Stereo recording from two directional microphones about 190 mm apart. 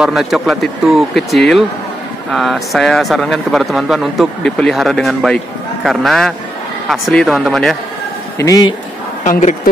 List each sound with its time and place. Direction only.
0.0 s speech: centre (ahead or behind)
8.4 s speech: 20° left (ahead or behind)